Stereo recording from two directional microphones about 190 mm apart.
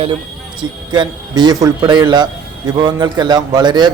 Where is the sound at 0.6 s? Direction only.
25° right (ahead or behind).